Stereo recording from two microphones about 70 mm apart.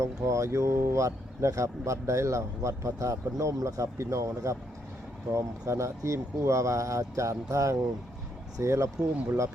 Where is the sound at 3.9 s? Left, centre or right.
Right.